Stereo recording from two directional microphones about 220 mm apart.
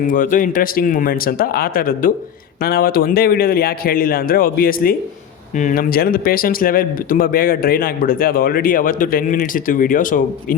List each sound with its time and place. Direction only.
0.1 s a man's voice: 35° left (ahead or behind)